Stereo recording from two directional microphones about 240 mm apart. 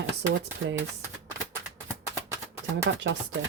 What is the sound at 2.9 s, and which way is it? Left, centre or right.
Speech, right.